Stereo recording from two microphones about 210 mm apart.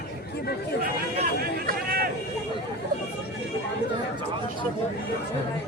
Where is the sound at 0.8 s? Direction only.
45° right (ahead or behind).